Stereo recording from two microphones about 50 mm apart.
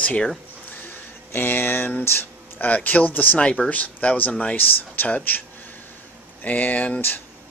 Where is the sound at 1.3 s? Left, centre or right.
Left.